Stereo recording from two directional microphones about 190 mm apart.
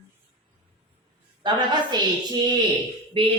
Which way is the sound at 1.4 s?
25° right (ahead or behind).